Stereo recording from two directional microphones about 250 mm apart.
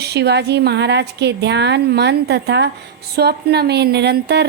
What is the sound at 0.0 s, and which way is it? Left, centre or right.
A woman's voice, right.